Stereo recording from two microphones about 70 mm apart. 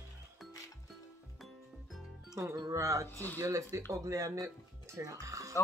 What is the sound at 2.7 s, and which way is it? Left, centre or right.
Speech, right.